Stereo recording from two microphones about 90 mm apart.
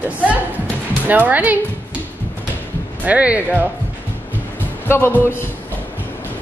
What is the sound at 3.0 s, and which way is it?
Speech, 15° right (ahead or behind).